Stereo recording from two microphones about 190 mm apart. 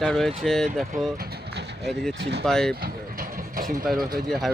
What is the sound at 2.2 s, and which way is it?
Speech, 60° right (ahead or behind).